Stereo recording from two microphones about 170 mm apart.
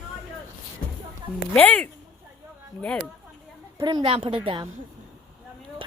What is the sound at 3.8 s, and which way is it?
Speech, 30° right (ahead or behind).